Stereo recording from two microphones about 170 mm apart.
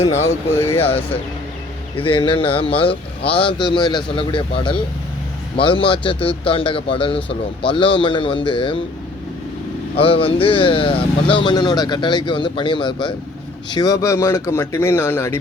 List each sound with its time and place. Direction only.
0.0 s speech: 40° left (ahead or behind)
0.5 s speech: 15° left (ahead or behind)
0.8 s speech: 35° left (ahead or behind)
9.9 s speech: 35° left (ahead or behind); by 15.4 s 15° left (ahead or behind)